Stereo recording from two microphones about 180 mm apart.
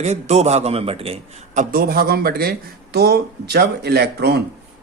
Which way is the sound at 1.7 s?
55° right (ahead or behind).